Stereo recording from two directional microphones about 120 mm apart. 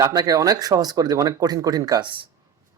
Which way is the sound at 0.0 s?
30° right (ahead or behind).